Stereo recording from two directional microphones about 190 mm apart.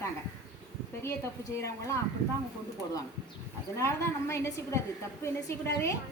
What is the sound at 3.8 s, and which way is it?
A woman's voice, 15° left (ahead or behind).